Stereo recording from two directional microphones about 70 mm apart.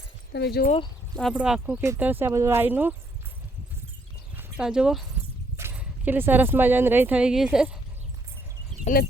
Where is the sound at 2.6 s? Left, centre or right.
Right.